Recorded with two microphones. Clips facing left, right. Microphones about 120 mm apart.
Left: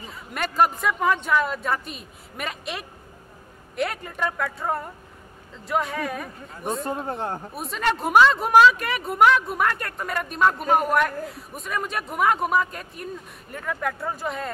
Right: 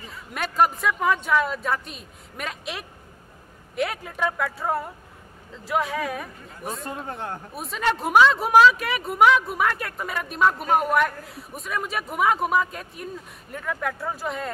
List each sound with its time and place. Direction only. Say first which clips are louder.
0.0 s speech: left 1 dB; centre (ahead or behind)
7.1 s speech: left 4 dB; 30° left (ahead or behind)
7.5 s speech: right 1 dB; centre (ahead or behind)